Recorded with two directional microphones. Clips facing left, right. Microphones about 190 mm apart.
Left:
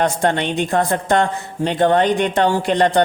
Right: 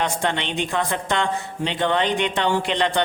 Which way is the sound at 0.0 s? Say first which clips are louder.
Left 6 dB; 45° left (ahead or behind).